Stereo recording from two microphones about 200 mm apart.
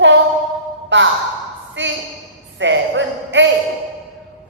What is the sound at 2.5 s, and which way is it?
Music, 65° right (ahead or behind).